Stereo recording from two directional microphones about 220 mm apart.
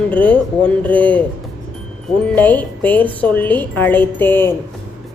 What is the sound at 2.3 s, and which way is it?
Speech, 5° left (ahead or behind).